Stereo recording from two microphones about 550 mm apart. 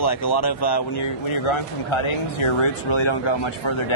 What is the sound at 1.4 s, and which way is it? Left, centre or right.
Speech, left.